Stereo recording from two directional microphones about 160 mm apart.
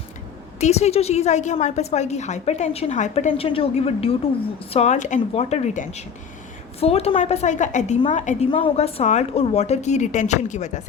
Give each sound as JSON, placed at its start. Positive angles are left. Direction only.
{"t": 0.6, "sound": "a woman's voice", "side_deg": 45}
{"t": 8.4, "sound": "a woman's voice", "side_deg": 35}